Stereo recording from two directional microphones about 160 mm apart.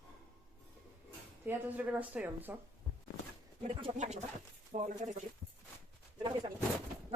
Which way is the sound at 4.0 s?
45° right (ahead or behind).